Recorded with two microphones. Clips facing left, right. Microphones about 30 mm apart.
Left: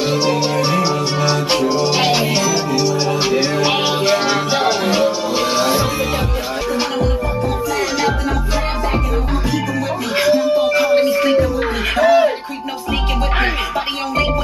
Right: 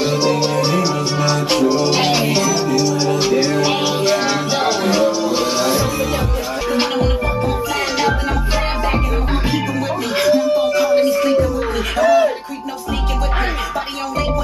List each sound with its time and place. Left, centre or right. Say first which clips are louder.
0.1 s music: even; centre
6.7 s music: right 2 dB; centre
10.1 s music: even; centre
12.0 s a sound: left 1 dB; left